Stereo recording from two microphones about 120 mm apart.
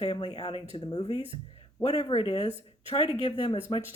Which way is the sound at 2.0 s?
50° left (ahead or behind).